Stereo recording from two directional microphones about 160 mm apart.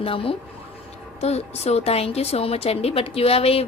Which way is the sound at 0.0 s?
35° left (ahead or behind).